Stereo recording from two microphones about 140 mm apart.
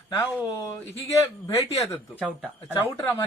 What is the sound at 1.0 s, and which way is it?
Speech, 20° left (ahead or behind).